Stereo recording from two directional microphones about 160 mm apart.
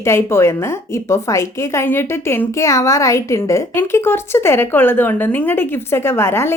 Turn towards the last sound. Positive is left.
turn(degrees=15)  # may be behind; listen again after turning